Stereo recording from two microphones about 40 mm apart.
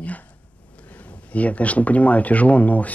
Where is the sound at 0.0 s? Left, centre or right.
Left.